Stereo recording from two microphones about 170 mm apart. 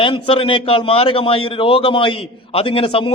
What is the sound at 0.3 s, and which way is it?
A man's voice, 30° left (ahead or behind).